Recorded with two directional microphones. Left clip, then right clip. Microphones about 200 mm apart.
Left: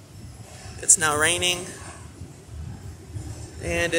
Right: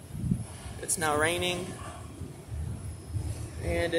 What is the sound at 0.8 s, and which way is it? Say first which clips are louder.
Speech: left 6 dB; centre (ahead or behind).